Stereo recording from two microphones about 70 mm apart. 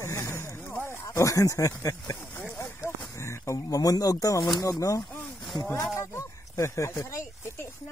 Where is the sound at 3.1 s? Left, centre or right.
Left.